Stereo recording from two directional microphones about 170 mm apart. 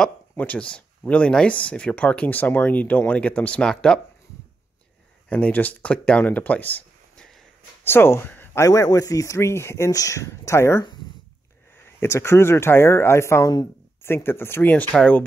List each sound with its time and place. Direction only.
0.0 s speech: 10° left (ahead or behind)
5.3 s speech: 10° left (ahead or behind)
12.0 s speech: 15° left (ahead or behind)